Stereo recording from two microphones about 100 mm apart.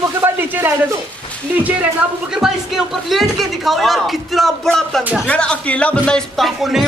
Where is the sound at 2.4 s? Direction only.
5° right (ahead or behind).